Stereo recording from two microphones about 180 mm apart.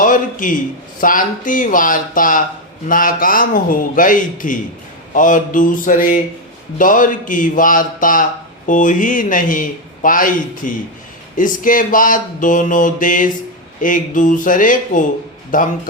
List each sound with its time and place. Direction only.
0.0 s a man's voice: 50° left (ahead or behind)